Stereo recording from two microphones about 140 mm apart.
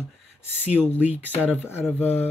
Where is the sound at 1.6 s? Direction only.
15° left (ahead or behind).